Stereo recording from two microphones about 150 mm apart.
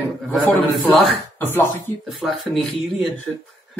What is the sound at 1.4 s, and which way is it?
Speech, 15° left (ahead or behind).